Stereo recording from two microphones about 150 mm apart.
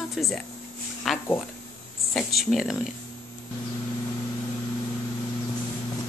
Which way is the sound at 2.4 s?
Centre (ahead or behind).